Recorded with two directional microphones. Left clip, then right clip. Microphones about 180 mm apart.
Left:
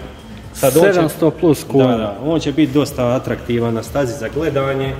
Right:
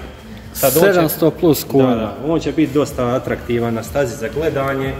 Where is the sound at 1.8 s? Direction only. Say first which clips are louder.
Left 1 dB; 70° left (ahead or behind).